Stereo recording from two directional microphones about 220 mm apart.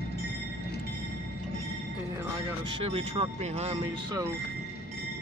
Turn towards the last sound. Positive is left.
turn(degrees=-30)  # may be behind; listen again after turning